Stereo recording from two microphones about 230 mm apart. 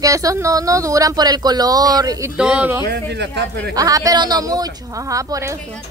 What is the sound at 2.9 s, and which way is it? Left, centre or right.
Speech, right.